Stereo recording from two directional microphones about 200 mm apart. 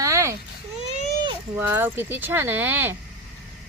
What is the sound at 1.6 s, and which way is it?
Speech, 10° right (ahead or behind).